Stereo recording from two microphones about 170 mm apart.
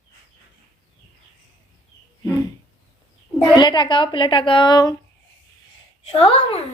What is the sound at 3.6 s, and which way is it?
A woman's voice, 25° left (ahead or behind).